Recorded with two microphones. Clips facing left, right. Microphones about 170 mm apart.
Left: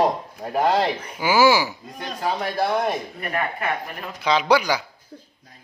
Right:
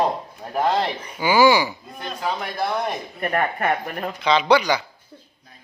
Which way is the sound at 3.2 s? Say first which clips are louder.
Right 4 dB; 50° right (ahead or behind).